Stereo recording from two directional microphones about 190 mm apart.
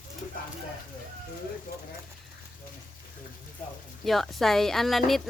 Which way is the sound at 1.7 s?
50° left (ahead or behind).